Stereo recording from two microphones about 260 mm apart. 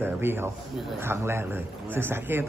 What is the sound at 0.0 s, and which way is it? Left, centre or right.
A man's voice, centre.